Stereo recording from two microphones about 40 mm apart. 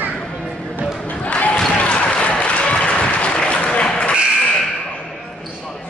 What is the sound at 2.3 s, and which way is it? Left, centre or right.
Applause, left.